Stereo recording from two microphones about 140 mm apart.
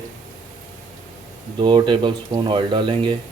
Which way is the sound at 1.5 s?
35° right (ahead or behind).